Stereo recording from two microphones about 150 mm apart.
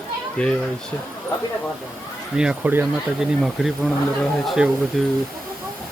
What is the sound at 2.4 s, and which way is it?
Speech, 10° right (ahead or behind).